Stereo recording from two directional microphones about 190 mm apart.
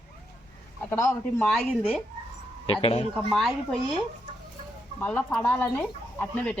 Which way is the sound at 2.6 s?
30° left (ahead or behind).